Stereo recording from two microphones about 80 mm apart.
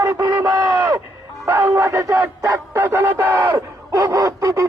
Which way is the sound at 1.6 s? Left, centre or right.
Right.